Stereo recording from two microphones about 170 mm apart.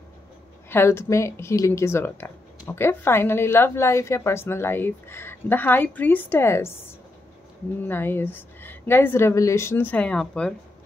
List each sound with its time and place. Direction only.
0.7 s a woman's voice: 15° left (ahead or behind)
7.9 s a woman's voice: 15° left (ahead or behind)